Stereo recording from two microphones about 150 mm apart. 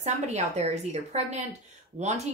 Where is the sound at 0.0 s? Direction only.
50° right (ahead or behind).